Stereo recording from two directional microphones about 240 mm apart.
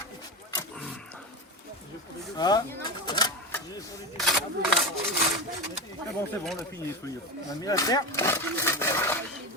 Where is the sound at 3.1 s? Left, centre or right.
Centre.